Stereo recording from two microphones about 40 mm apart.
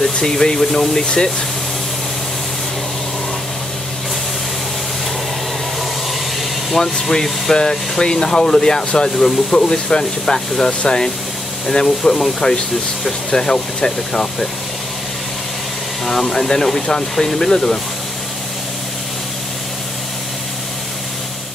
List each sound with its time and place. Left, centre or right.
0.0 s speech: centre
6.8 s speech: centre
16.1 s speech: centre